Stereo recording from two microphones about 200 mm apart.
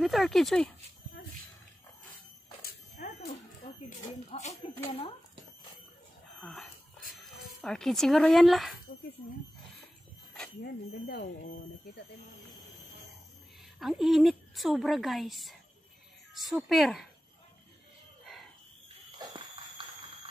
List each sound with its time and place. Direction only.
0.0 s a woman's voice: centre (ahead or behind)
2.6 s dog: 45° left (ahead or behind)
4.3 s speech: 30° left (ahead or behind)
6.4 s a woman's voice: centre (ahead or behind)
10.6 s speech: 50° left (ahead or behind)
13.7 s a woman's voice: centre (ahead or behind)
18.2 s a sound: centre (ahead or behind)
19.1 s a sound: 25° right (ahead or behind)